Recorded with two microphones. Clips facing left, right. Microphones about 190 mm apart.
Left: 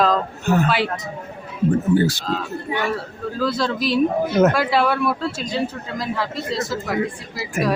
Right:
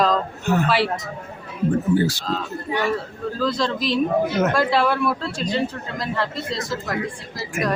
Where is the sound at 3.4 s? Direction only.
5° left (ahead or behind).